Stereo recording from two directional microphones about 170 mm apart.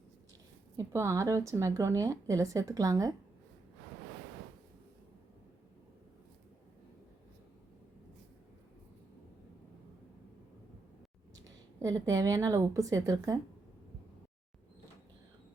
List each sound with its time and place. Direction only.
0.8 s a woman's voice: 20° right (ahead or behind)
11.8 s a woman's voice: 20° right (ahead or behind)